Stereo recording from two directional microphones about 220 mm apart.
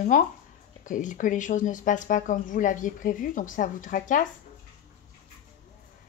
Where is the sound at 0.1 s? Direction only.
35° left (ahead or behind).